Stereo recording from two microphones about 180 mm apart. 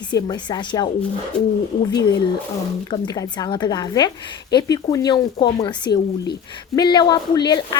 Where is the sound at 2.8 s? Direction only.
20° left (ahead or behind).